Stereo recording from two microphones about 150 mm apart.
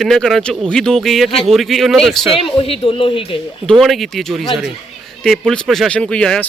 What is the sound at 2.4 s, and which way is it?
A woman's voice, 35° left (ahead or behind).